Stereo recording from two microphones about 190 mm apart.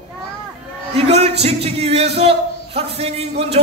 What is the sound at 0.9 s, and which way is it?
A man's voice, 30° right (ahead or behind).